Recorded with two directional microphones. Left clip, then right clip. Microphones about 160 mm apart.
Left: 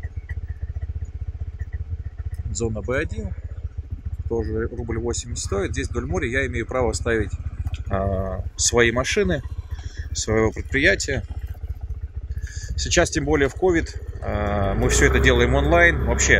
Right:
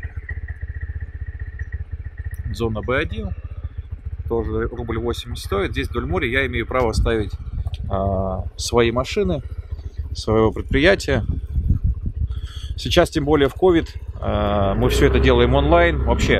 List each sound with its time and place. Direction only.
2.6 s speech: 5° right (ahead or behind)
4.3 s speech: 5° right (ahead or behind); by 11.2 s 25° right (ahead or behind)
12.7 s speech: 20° right (ahead or behind)